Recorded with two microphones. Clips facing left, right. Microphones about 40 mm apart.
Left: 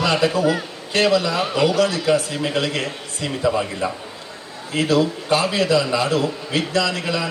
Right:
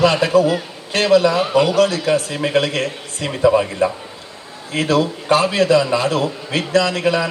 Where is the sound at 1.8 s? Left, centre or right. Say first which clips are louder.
Right 2 dB; right.